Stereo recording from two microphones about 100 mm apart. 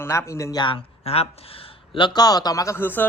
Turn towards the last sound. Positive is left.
turn(degrees=20)  # may be behind; listen again after turning